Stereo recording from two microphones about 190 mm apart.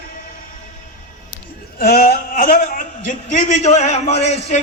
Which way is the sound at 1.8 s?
55° left (ahead or behind).